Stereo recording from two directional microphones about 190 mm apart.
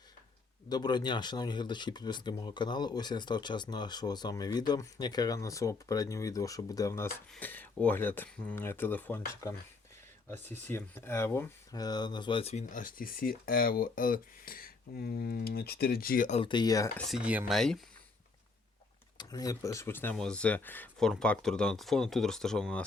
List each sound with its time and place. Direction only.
0.7 s speech: 20° left (ahead or behind); by 16.4 s 45° left (ahead or behind)
16.4 s speech: 25° left (ahead or behind)
17.1 s speech: 5° right (ahead or behind)
19.1 s speech: 20° left (ahead or behind); by 22.8 s 5° left (ahead or behind)